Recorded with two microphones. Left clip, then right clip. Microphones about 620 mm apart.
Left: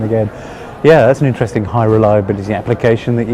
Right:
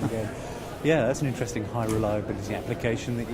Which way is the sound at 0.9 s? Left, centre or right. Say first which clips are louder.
Left 16 dB; left.